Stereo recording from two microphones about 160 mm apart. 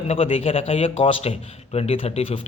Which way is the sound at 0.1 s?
35° left (ahead or behind).